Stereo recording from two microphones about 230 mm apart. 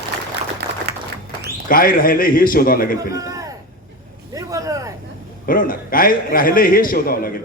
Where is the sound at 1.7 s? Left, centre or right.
Left.